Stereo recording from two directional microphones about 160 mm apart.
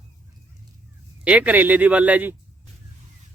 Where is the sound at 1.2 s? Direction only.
10° right (ahead or behind).